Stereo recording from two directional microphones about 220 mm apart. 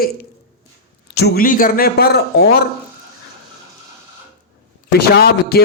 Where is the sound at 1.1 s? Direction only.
45° left (ahead or behind).